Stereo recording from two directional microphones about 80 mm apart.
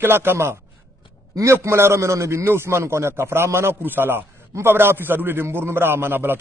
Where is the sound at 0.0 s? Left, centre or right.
Right.